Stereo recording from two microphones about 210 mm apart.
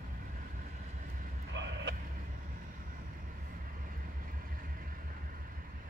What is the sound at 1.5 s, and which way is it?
Vehicle, 60° right (ahead or behind).